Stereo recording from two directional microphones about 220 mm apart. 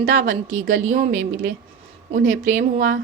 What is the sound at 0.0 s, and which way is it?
A woman's voice, 40° right (ahead or behind).